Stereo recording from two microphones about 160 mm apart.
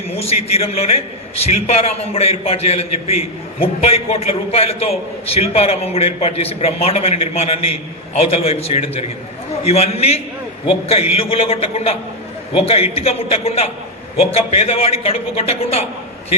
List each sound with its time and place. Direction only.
0.1 s a man's voice: 40° left (ahead or behind)